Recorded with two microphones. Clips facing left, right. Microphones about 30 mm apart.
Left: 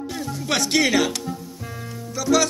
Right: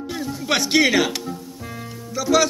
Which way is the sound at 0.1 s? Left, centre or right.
Centre.